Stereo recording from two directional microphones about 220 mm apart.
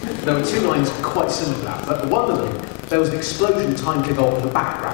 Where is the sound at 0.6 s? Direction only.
25° left (ahead or behind).